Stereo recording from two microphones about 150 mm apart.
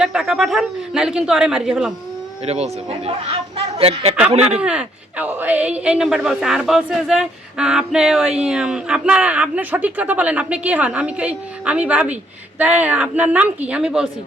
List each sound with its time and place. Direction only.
0.0 s speech: 5° right (ahead or behind)
3.8 s speech: 40° right (ahead or behind)
4.6 s a woman's voice: 5° right (ahead or behind)